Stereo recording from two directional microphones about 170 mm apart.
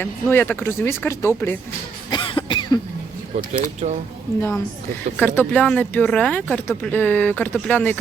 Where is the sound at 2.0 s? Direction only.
30° left (ahead or behind).